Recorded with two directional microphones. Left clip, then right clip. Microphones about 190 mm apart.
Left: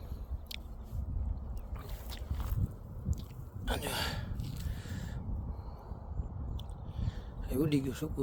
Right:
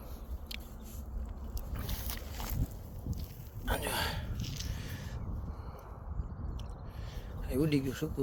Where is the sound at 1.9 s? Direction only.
45° right (ahead or behind).